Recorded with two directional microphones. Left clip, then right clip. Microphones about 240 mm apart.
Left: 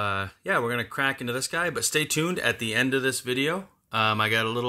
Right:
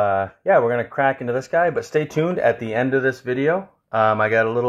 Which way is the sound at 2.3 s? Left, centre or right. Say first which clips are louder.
Right 7 dB; left.